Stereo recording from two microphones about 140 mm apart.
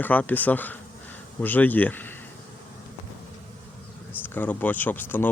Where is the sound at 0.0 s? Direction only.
10° left (ahead or behind).